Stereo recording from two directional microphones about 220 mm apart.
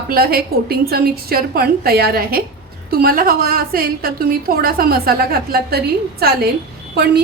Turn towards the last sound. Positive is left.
turn(degrees=-45)  # may be behind; listen again after turning